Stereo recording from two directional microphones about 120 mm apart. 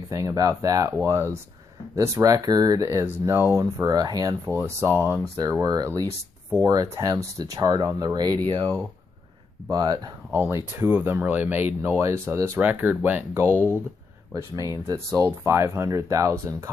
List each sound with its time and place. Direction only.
0.1 s speech: 30° right (ahead or behind)
4.5 s speech: 20° right (ahead or behind)
5.5 s speech: 30° right (ahead or behind)
9.7 s speech: 30° right (ahead or behind)
10.3 s speech: 20° right (ahead or behind)